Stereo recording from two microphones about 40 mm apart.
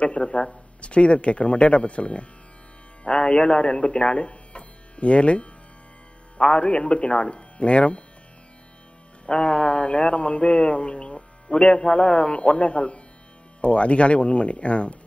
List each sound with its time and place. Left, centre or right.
0.0 s a man's voice: left
9.2 s a man's voice: left